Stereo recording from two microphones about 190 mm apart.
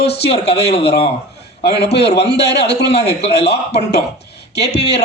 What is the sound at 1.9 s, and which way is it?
A man's voice, 60° left (ahead or behind).